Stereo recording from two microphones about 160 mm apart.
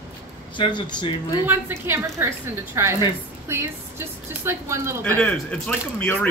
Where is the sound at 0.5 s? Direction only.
30° left (ahead or behind).